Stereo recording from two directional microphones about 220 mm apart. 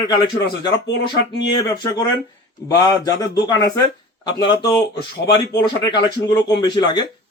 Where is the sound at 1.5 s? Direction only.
20° left (ahead or behind).